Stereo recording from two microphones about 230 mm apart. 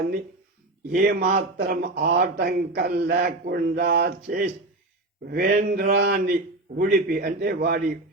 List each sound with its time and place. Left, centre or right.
0.9 s a man's voice: right